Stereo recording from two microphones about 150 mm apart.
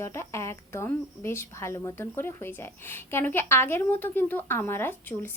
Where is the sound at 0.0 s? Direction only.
20° left (ahead or behind).